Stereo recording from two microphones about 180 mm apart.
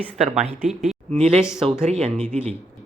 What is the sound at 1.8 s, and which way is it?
Speech, 35° right (ahead or behind).